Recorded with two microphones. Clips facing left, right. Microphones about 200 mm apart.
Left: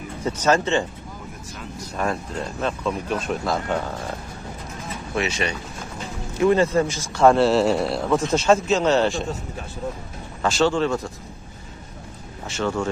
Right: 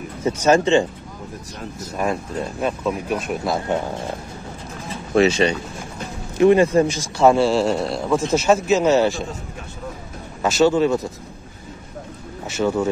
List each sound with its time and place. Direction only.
0.2 s speech: 10° right (ahead or behind)
2.6 s speech: 10° right (ahead or behind)
3.5 s speech: 20° right (ahead or behind)
5.1 s speech: 30° right (ahead or behind)
6.4 s speech: 15° right (ahead or behind)
7.2 s a man's voice: centre (ahead or behind)
10.4 s speech: 10° right (ahead or behind)
12.5 s speech: 10° right (ahead or behind)